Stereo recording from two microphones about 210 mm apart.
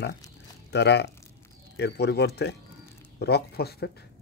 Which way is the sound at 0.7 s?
55° left (ahead or behind).